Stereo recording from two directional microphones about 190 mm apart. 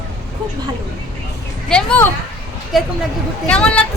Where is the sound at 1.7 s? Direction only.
10° left (ahead or behind).